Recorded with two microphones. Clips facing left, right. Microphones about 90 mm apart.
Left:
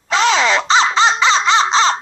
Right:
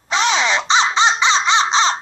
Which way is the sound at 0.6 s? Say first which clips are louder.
Left 2 dB; 35° left (ahead or behind).